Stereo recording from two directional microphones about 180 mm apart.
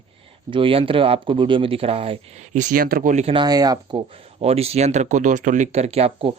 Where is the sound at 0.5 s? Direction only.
30° right (ahead or behind).